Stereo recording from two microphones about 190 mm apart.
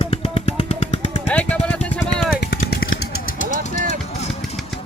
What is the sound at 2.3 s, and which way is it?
Vehicle, 55° left (ahead or behind).